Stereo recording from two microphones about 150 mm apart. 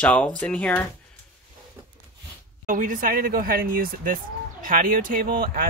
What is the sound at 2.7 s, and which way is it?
Speech, 60° right (ahead or behind).